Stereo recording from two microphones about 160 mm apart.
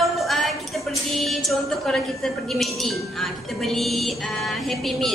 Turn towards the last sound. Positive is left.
turn(degrees=0)  # may be behind; listen again after turning